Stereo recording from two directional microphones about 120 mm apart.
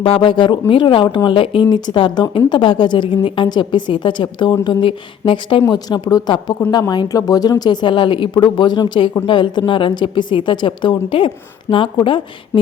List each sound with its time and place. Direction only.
0.0 s a woman's voice: 45° left (ahead or behind)
11.7 s speech: 25° left (ahead or behind)